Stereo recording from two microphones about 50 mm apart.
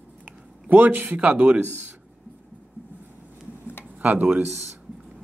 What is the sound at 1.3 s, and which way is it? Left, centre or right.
Speech, right.